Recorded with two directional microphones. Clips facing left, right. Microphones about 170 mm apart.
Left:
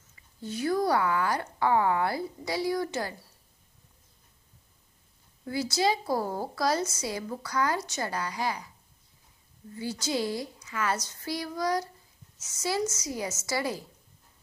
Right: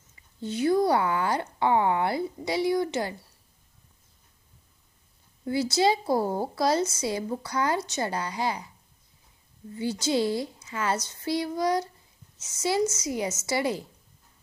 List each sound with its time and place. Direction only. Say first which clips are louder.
0.4 s a woman's voice: right 4 dB; 25° right (ahead or behind)
5.4 s a woman's voice: right 4 dB; 25° right (ahead or behind)
9.8 s a woman's voice: right 5 dB; 25° right (ahead or behind)